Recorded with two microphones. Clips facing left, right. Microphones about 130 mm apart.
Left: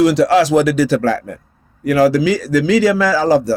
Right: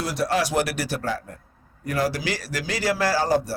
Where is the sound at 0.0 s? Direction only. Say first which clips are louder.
Left 13 dB; 90° left.